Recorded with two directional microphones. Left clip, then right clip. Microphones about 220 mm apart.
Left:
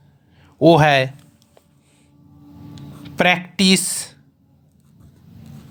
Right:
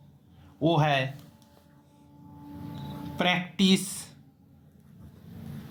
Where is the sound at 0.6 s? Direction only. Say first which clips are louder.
Left 12 dB; 50° left (ahead or behind).